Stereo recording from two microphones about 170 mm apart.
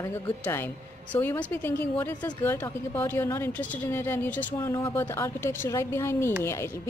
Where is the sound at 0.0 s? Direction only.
15° left (ahead or behind).